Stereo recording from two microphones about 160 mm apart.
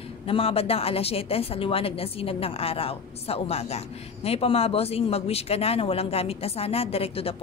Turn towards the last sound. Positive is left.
turn(degrees=35)  # may be behind; listen again after turning